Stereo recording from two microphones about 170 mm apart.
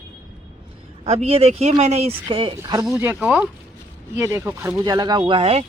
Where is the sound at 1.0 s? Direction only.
35° right (ahead or behind); by 2.8 s 20° right (ahead or behind).